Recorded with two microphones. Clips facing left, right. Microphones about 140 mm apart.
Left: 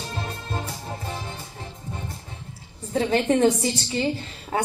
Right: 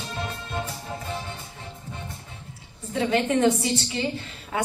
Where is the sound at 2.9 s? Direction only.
35° left (ahead or behind).